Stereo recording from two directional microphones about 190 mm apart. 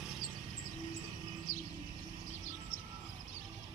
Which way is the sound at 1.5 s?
45° left (ahead or behind).